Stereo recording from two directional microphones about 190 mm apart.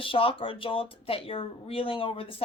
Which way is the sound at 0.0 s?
30° left (ahead or behind).